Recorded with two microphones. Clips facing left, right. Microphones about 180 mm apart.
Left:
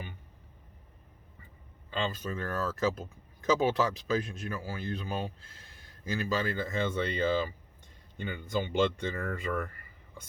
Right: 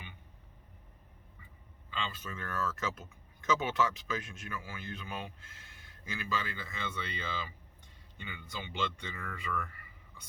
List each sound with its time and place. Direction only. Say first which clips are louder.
1.9 s speech: left 7 dB; 40° left (ahead or behind)